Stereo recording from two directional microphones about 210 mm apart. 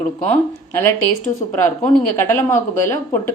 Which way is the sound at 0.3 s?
10° left (ahead or behind).